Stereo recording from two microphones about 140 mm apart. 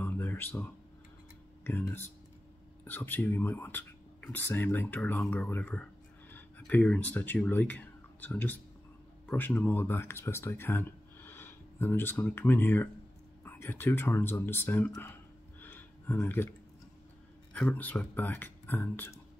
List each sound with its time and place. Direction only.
0.0 s music: 15° left (ahead or behind)
1.6 s speech: 15° left (ahead or behind)
15.6 s a sound: 15° left (ahead or behind)
17.5 s speech: 10° left (ahead or behind)